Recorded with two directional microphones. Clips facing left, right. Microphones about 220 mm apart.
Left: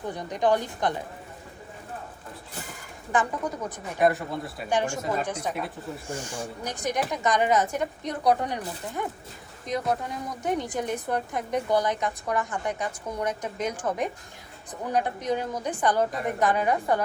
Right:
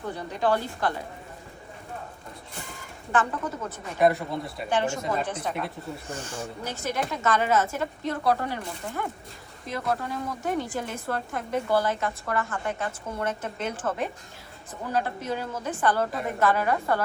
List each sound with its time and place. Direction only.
0.1 s a woman's voice: 15° left (ahead or behind)
3.1 s a woman's voice: 15° left (ahead or behind)
4.0 s speech: centre (ahead or behind)
4.7 s a woman's voice: 15° left (ahead or behind)
4.9 s a woman's voice: centre (ahead or behind); by 8.6 s 15° left (ahead or behind)
9.6 s a woman's voice: 20° left (ahead or behind)